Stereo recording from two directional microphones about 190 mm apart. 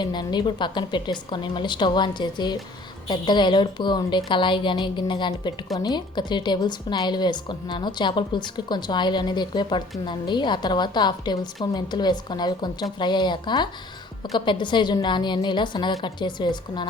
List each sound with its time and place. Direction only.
0.0 s a woman's voice: 25° left (ahead or behind)